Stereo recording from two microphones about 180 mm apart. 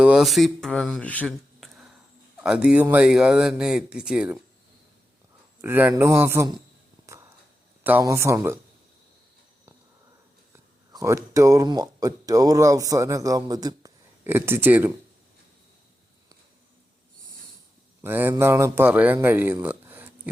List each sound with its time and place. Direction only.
0.0 s speech: 5° right (ahead or behind)
5.6 s a man's voice: 10° right (ahead or behind)
7.0 s a sound: 15° right (ahead or behind)
7.9 s a man's voice: 15° right (ahead or behind)
10.9 s speech: 15° right (ahead or behind)
18.0 s a man's voice: 10° right (ahead or behind)
19.6 s a sound: 10° right (ahead or behind)